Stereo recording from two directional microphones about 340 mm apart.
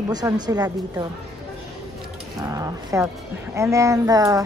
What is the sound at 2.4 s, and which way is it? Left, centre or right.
Speech, centre.